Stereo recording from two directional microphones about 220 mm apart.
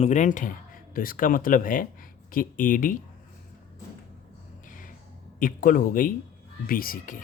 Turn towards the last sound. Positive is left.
turn(degrees=40)  # may be behind; listen again after turning